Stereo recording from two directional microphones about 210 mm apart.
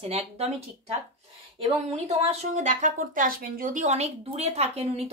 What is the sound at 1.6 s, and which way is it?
Speech, 30° right (ahead or behind).